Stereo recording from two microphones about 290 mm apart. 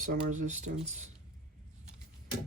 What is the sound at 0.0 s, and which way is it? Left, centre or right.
Speech, right.